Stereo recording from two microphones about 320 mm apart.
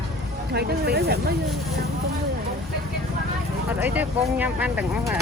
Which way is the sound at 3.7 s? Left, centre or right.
Centre.